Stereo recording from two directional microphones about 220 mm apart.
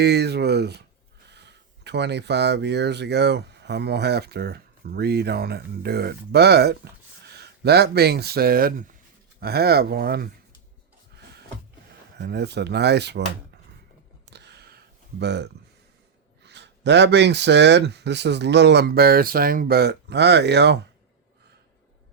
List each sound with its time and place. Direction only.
0.0 s speech: 50° right (ahead or behind)
12.2 s speech: 50° right (ahead or behind)
14.3 s a sound: 50° right (ahead or behind)
15.2 s speech: 50° right (ahead or behind)